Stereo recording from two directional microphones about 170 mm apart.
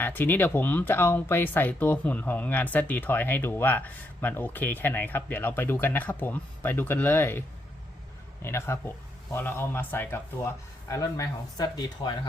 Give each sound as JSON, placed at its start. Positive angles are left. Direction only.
{"t": 0.0, "sound": "speech", "side_deg": 10}